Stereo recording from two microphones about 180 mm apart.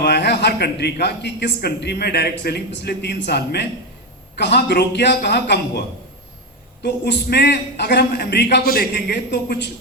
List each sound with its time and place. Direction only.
0.0 s a man's voice: 70° left (ahead or behind)
6.8 s a man's voice: 65° left (ahead or behind)